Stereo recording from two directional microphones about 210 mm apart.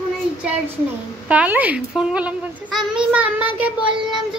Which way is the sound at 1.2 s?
5° right (ahead or behind).